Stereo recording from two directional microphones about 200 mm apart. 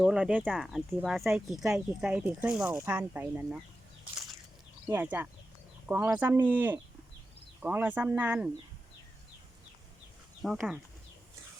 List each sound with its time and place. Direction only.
0.0 s speech: 5° right (ahead or behind)
4.9 s speech: 10° right (ahead or behind)
10.4 s speech: centre (ahead or behind)